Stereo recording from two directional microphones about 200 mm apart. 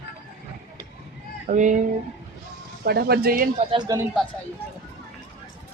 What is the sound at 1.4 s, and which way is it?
Speech, 40° right (ahead or behind).